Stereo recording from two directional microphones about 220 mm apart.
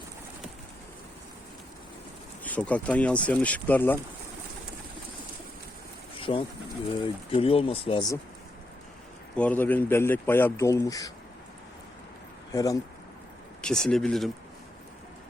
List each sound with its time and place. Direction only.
2.4 s speech: 5° left (ahead or behind)
6.1 s pigeon: 25° left (ahead or behind)
7.0 s speech: 25° left (ahead or behind)
9.3 s speech: 5° left (ahead or behind)
12.5 s speech: 15° left (ahead or behind)
13.6 s speech: 5° left (ahead or behind)